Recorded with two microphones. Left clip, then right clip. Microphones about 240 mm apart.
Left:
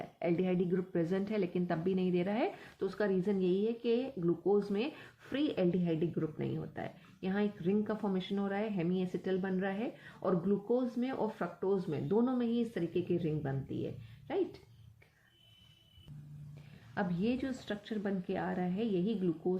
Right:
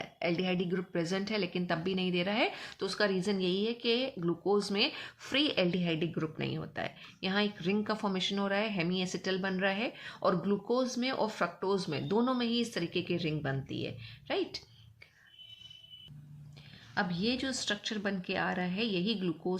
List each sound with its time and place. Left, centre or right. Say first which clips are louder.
0.0 s a woman's voice: right 1 dB; centre
16.9 s a woman's voice: right 3 dB; centre